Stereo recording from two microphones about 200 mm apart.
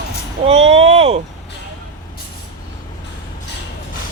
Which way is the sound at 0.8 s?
30° right (ahead or behind).